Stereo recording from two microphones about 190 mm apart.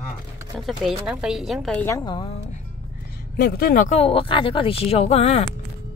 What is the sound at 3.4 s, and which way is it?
Speech, 50° left (ahead or behind).